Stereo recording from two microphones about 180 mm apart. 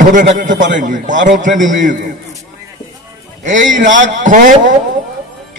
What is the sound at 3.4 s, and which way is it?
A man's voice, 45° right (ahead or behind).